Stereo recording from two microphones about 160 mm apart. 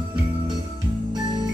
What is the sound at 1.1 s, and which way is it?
Music, 25° right (ahead or behind).